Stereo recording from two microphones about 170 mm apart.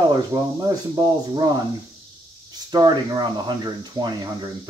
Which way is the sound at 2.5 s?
25° right (ahead or behind).